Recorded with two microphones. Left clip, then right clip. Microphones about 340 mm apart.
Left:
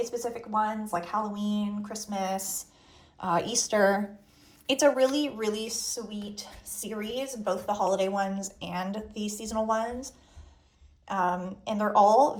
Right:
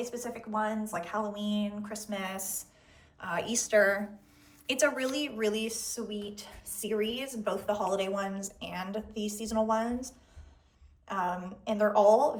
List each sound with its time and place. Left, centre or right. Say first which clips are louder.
0.0 s a woman's voice: left 5 dB; centre